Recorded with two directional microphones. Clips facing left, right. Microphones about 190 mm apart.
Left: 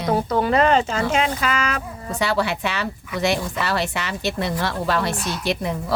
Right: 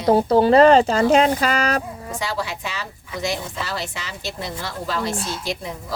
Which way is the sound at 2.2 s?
65° left (ahead or behind).